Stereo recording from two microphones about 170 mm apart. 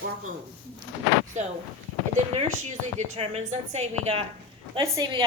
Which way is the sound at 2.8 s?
40° right (ahead or behind).